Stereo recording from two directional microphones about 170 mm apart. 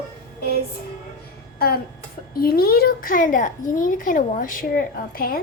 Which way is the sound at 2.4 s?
65° left (ahead or behind).